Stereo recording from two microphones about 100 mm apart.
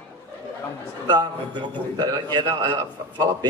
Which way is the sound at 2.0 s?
50° right (ahead or behind).